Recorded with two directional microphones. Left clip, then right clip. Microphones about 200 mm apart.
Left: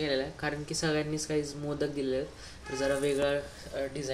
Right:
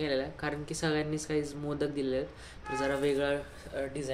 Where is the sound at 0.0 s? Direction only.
Centre (ahead or behind).